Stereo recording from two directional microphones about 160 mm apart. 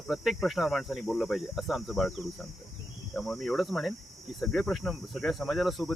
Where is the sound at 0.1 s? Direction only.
Centre (ahead or behind).